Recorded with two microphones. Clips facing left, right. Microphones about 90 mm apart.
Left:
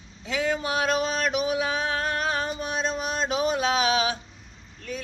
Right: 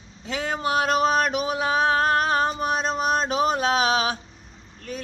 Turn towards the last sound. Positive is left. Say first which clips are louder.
# right 2 dB
turn(degrees=-40)  # may be behind; listen again after turning